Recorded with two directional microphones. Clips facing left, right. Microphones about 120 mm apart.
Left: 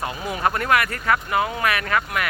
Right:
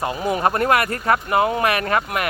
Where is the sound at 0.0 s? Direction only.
30° right (ahead or behind).